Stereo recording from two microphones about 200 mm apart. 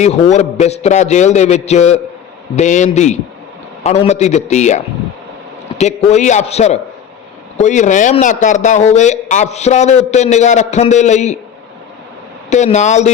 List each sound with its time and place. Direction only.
0.0 s a man's voice: 35° left (ahead or behind)
12.5 s a man's voice: 35° left (ahead or behind)